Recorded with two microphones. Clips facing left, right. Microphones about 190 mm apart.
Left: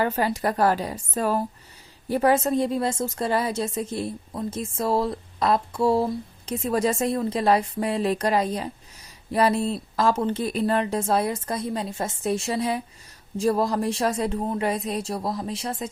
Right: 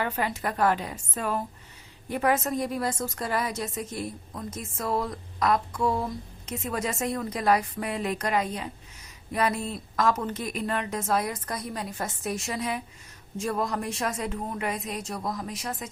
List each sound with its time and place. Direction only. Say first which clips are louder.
0.0 s a woman's voice: left 6 dB; 35° left (ahead or behind)